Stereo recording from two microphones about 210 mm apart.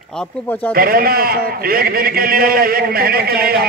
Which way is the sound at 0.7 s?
45° right (ahead or behind).